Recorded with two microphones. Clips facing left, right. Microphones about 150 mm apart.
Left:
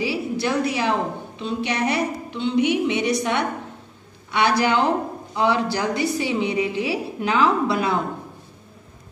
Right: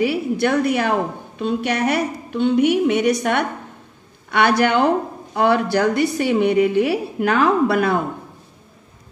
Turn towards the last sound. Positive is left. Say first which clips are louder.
# right 3 dB
turn(degrees=-55)  # may be behind; listen again after turning